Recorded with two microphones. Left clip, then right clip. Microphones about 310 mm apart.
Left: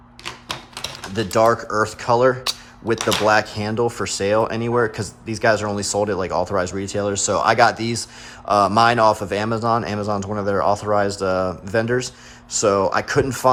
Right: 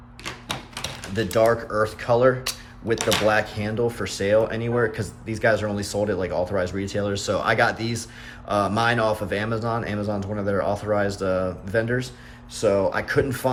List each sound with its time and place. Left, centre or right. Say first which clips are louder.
1.1 s speech: left 3 dB; centre